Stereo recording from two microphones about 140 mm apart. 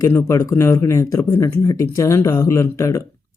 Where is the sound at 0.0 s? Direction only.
20° left (ahead or behind).